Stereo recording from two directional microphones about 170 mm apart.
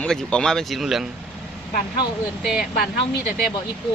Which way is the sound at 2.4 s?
5° right (ahead or behind).